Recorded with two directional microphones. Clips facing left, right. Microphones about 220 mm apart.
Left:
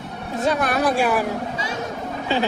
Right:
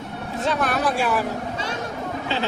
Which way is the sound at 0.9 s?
15° left (ahead or behind).